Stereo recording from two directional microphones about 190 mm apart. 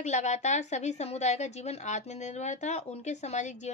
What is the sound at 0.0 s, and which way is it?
A woman's voice, 35° left (ahead or behind).